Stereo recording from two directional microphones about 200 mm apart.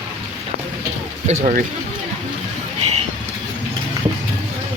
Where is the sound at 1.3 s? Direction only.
35° right (ahead or behind).